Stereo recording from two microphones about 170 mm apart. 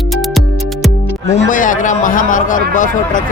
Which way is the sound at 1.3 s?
45° left (ahead or behind).